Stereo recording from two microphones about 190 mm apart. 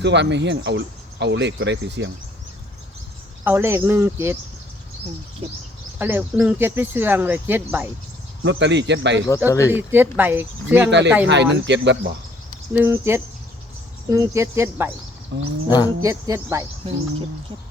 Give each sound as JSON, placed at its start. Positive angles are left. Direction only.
{"t": 0.0, "sound": "speech", "side_deg": -65}
{"t": 3.4, "sound": "speech", "side_deg": -10}
{"t": 6.0, "sound": "speech", "side_deg": -10}
{"t": 8.4, "sound": "speech", "side_deg": -70}
{"t": 9.5, "sound": "speech", "side_deg": 15}
{"t": 9.7, "sound": "speech", "side_deg": -10}
{"t": 10.8, "sound": "speech", "side_deg": -65}
{"t": 12.7, "sound": "speech", "side_deg": -10}
{"t": 15.3, "sound": "speech", "side_deg": -65}
{"t": 16.0, "sound": "speech", "side_deg": -15}
{"t": 16.8, "sound": "speech", "side_deg": -30}